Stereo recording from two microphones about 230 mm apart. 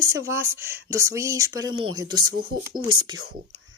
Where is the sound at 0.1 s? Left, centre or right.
Centre.